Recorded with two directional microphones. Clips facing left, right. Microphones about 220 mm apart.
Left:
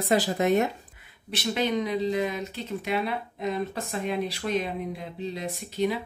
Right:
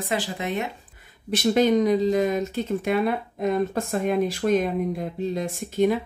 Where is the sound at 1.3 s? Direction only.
45° right (ahead or behind).